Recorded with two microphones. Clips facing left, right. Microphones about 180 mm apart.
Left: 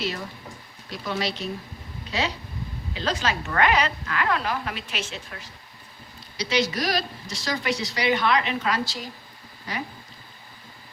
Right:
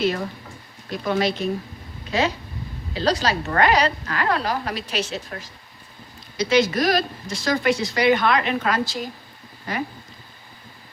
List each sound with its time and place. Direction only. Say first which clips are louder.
0.0 s speech: right 7 dB; 50° right (ahead or behind)
2.9 s a woman's voice: right 5 dB; 35° right (ahead or behind); by 9.8 s 50° right (ahead or behind)